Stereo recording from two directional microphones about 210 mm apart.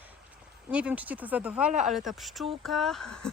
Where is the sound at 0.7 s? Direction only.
5° right (ahead or behind).